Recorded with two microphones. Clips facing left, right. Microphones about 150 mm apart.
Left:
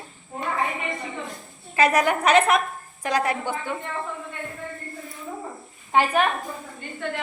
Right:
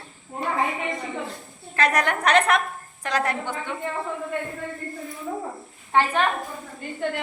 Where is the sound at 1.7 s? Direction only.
5° left (ahead or behind).